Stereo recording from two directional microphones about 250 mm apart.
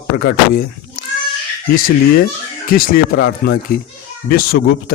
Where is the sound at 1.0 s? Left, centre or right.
Left.